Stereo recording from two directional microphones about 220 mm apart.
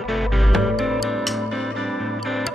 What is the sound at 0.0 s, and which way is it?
Music, centre (ahead or behind).